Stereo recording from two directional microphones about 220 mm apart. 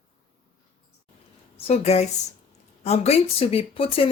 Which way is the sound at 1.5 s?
30° left (ahead or behind).